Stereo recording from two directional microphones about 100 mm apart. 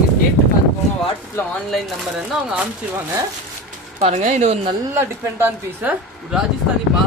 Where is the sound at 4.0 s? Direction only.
90° right.